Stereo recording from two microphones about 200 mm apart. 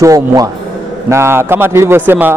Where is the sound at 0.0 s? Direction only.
15° right (ahead or behind).